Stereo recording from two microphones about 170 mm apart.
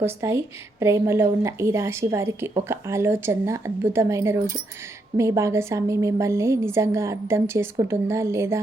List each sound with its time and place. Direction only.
0.0 s a woman's voice: 15° right (ahead or behind)